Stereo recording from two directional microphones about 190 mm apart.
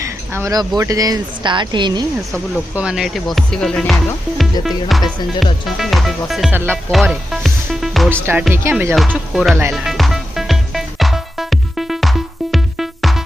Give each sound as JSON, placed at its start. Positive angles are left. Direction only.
{"t": 0.0, "sound": "a sound", "side_deg": -15}
{"t": 0.8, "sound": "speech", "side_deg": -20}
{"t": 2.7, "sound": "speech", "side_deg": -5}
{"t": 8.1, "sound": "speech", "side_deg": -10}
{"t": 9.0, "sound": "speech", "side_deg": 0}
{"t": 9.7, "sound": "music", "side_deg": 0}